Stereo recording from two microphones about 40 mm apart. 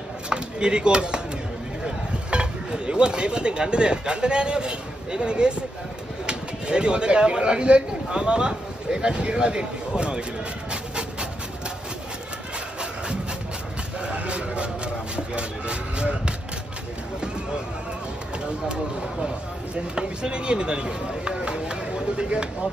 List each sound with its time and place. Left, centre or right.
0.3 s chop: right
2.3 s speech: right
10.7 s a sound: right
14.0 s a sound: right
15.1 s speech: right
19.7 s speech: right